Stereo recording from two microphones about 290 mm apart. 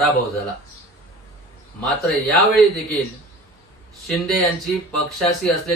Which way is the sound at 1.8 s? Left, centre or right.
Centre.